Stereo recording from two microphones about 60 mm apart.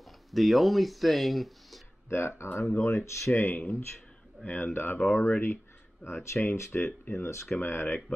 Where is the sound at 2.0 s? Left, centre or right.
Left.